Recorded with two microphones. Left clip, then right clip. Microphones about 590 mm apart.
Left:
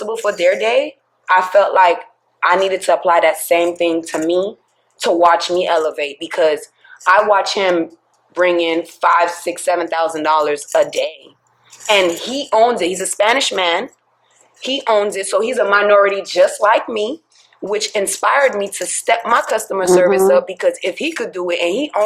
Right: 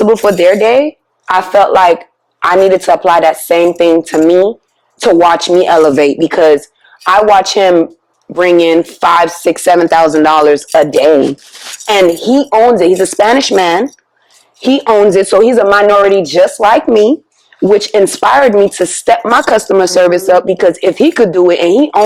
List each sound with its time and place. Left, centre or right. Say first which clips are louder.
0.1 s speech: right 5 dB; right
11.9 s speech: right 6 dB; right
18.0 s speech: right 7 dB; right